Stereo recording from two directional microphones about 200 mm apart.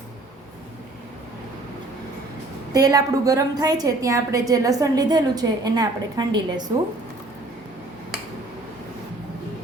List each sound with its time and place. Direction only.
2.7 s a woman's voice: 20° right (ahead or behind)